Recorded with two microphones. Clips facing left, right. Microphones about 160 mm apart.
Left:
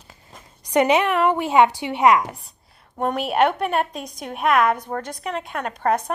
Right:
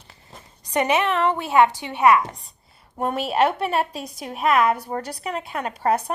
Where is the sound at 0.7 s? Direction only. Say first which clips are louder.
Left 3 dB; 15° left (ahead or behind).